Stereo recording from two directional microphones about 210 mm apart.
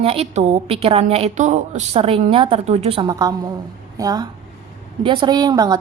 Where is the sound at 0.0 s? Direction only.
30° right (ahead or behind).